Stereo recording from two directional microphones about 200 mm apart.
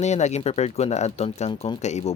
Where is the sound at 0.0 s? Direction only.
35° left (ahead or behind).